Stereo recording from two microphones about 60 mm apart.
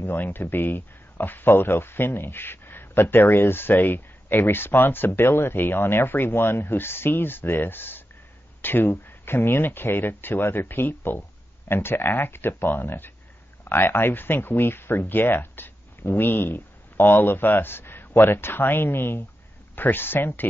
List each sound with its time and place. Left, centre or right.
0.0 s speech: left